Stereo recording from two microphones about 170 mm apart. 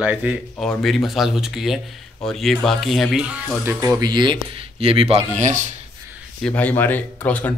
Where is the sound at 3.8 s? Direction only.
20° right (ahead or behind); by 5.6 s 45° right (ahead or behind).